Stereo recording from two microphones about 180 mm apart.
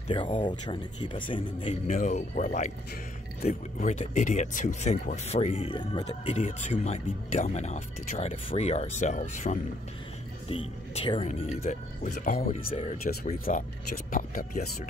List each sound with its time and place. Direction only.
0.1 s speech: 25° left (ahead or behind)
2.0 s speech: 45° left (ahead or behind)
12.5 s speech: 35° left (ahead or behind)
13.0 s speech: 55° left (ahead or behind)